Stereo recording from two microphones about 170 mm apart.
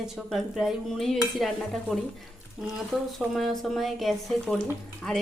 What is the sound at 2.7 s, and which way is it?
Dishes, centre (ahead or behind).